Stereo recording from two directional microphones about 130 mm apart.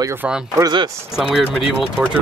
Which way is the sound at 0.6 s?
30° right (ahead or behind).